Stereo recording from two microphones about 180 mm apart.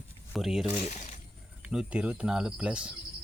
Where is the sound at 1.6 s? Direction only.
5° right (ahead or behind).